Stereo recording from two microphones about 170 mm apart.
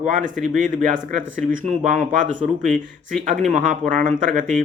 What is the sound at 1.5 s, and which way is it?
Speech, 45° right (ahead or behind).